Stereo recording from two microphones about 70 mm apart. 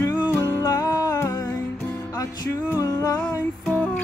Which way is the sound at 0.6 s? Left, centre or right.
Left.